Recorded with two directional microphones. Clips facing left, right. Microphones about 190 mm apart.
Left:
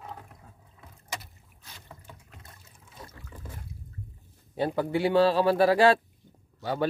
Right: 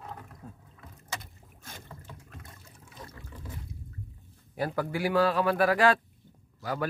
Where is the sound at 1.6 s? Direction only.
50° right (ahead or behind).